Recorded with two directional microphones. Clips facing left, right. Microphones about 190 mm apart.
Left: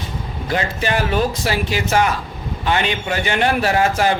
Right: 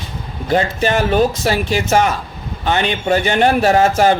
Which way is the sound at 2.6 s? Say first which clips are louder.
Right 3 dB; 35° right (ahead or behind).